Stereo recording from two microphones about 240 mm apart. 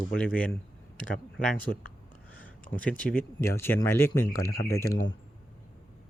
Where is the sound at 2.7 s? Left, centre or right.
Centre.